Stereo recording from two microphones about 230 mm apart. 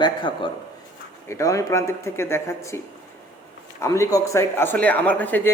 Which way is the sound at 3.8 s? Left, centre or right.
Centre.